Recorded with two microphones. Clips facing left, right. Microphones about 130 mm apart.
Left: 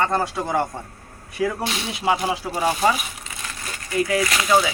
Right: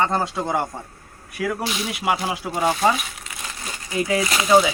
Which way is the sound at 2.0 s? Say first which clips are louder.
Left 2 dB; 10° right (ahead or behind).